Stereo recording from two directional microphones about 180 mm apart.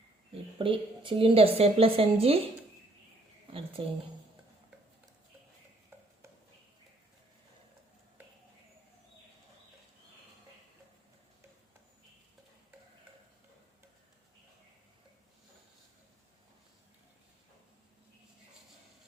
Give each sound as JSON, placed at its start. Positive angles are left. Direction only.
{"t": 0.6, "sound": "a woman's voice", "side_deg": -30}
{"t": 3.4, "sound": "a woman's voice", "side_deg": -30}